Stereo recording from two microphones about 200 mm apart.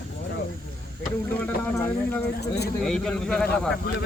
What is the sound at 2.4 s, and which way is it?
Speech, 55° left (ahead or behind).